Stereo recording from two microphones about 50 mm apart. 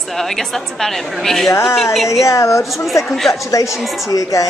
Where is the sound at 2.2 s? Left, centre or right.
Left.